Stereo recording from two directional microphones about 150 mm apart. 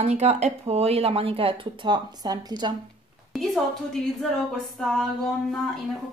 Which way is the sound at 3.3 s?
Centre (ahead or behind).